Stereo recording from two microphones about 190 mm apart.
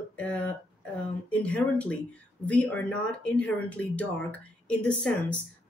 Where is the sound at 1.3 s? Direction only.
5° left (ahead or behind).